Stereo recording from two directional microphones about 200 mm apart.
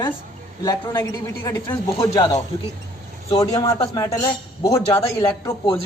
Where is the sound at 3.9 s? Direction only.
20° left (ahead or behind).